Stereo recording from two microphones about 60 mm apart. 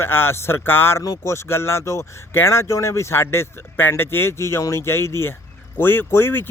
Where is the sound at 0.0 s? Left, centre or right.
Left.